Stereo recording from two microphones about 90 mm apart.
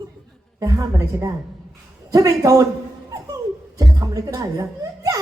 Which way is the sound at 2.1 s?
40° right (ahead or behind).